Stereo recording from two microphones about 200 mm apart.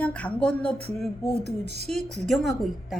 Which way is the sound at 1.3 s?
55° left (ahead or behind).